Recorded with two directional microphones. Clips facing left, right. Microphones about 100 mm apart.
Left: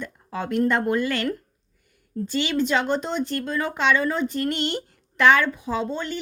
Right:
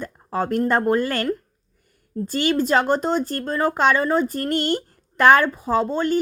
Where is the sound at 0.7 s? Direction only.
40° right (ahead or behind).